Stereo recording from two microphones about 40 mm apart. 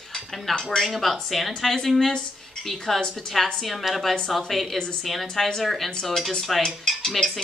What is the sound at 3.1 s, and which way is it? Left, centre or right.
Speech, centre.